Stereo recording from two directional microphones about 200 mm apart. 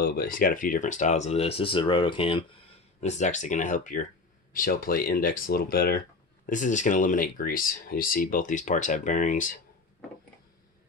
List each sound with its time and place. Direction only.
0.0 s speech: 45° left (ahead or behind); by 2.4 s 25° left (ahead or behind)
3.0 s speech: 35° left (ahead or behind)